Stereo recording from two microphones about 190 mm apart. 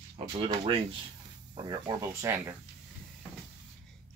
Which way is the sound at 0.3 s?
30° right (ahead or behind).